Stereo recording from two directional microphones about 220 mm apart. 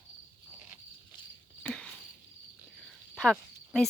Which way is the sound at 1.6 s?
5° left (ahead or behind).